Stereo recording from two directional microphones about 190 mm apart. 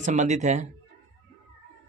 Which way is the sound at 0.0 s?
40° right (ahead or behind).